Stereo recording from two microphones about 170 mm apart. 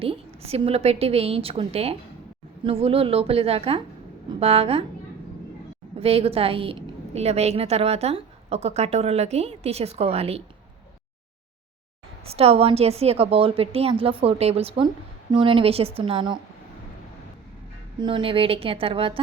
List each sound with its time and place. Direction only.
0.0 s a woman's voice: 35° right (ahead or behind)
6.0 s a woman's voice: 35° right (ahead or behind)
12.2 s a woman's voice: 35° right (ahead or behind)
18.0 s a woman's voice: 30° right (ahead or behind)